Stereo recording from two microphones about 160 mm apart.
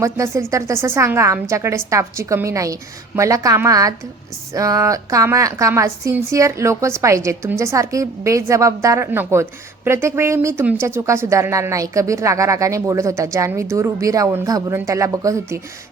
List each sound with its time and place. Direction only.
0.0 s a woman's voice: 20° right (ahead or behind)